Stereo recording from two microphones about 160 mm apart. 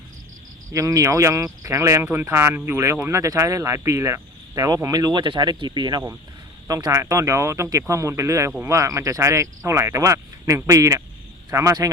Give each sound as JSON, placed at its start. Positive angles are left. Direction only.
{"t": 0.7, "sound": "speech", "side_deg": -20}